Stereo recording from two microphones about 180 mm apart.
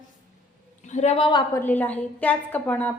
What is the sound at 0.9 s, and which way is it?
Speech, 40° left (ahead or behind).